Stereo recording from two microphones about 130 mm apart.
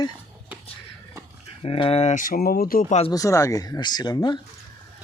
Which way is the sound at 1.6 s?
45° left (ahead or behind).